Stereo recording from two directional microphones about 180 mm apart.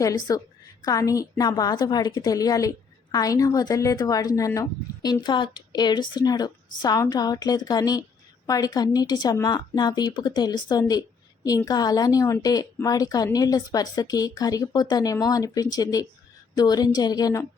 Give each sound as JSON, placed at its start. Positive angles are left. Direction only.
{"t": 0.0, "sound": "a woman's voice", "side_deg": 20}